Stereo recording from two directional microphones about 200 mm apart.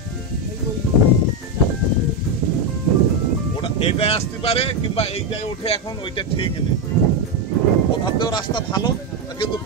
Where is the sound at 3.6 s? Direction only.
30° left (ahead or behind).